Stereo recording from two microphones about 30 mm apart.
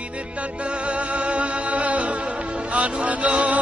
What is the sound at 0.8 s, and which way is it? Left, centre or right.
Music, right.